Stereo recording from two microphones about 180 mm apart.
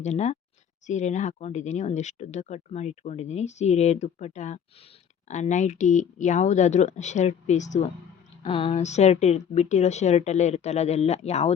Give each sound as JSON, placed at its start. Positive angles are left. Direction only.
{"t": 0.0, "sound": "speech", "side_deg": 40}
{"t": 8.4, "sound": "speech", "side_deg": 30}